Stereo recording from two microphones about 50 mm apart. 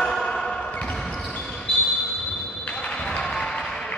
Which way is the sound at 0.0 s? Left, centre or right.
Centre.